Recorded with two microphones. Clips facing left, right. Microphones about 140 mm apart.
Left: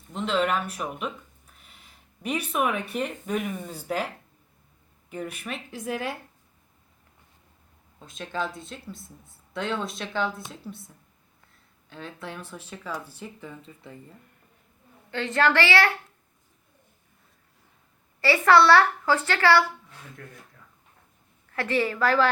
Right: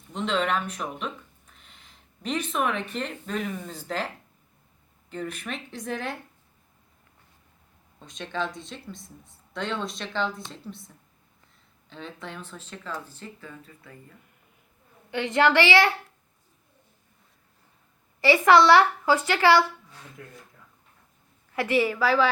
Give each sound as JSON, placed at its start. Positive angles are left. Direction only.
{"t": 0.1, "sound": "speech", "side_deg": 0}
{"t": 7.9, "sound": "speech", "side_deg": 5}
{"t": 11.9, "sound": "speech", "side_deg": 5}
{"t": 15.1, "sound": "a woman's voice", "side_deg": -15}
{"t": 18.2, "sound": "a woman's voice", "side_deg": -15}
{"t": 21.5, "sound": "a woman's voice", "side_deg": -15}